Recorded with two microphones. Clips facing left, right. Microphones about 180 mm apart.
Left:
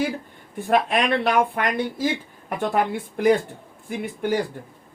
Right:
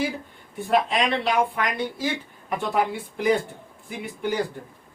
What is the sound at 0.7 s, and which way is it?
Speech, 55° left (ahead or behind).